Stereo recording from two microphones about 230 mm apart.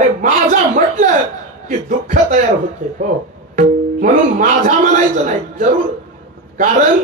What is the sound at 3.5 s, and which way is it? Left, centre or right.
Speech, right.